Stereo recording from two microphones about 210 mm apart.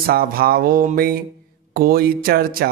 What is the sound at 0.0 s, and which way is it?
Mantra, 45° right (ahead or behind).